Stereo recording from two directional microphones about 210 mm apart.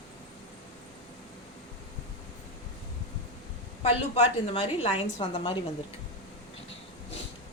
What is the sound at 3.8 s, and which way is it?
A woman's voice, 30° left (ahead or behind).